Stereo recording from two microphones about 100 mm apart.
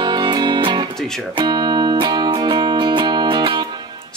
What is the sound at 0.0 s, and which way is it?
Music, 45° right (ahead or behind).